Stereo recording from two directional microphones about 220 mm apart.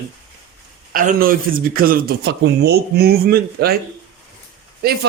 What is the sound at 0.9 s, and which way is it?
A man's voice, 40° right (ahead or behind).